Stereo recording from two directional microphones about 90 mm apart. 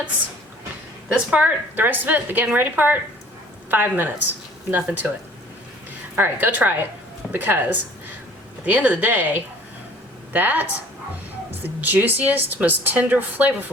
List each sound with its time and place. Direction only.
1.1 s speech: 10° right (ahead or behind)
6.1 s speech: 20° right (ahead or behind)